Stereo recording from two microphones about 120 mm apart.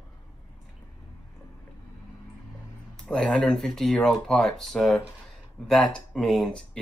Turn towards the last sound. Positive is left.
turn(degrees=5)  # may be behind; listen again after turning